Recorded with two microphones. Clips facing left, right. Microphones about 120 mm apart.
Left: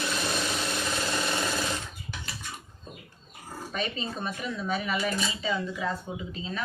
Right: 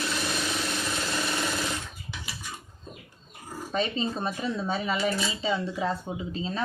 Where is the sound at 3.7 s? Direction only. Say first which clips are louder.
Right 5 dB; 30° right (ahead or behind).